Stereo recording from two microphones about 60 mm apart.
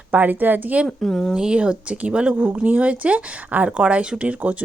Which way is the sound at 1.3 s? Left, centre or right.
Centre.